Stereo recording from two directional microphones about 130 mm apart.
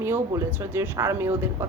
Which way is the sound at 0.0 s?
20° right (ahead or behind).